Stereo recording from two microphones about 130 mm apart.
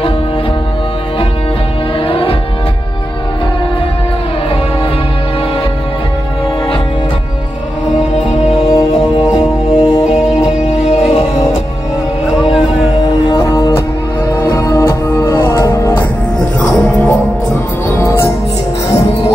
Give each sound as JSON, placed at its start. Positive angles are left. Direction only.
{"t": 2.0, "sound": "music", "side_deg": 45}
{"t": 8.5, "sound": "music", "side_deg": 45}
{"t": 13.0, "sound": "music", "side_deg": 30}